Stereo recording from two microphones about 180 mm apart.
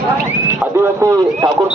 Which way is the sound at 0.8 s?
15° right (ahead or behind).